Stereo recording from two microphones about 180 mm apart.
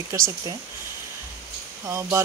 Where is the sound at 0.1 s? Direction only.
15° right (ahead or behind).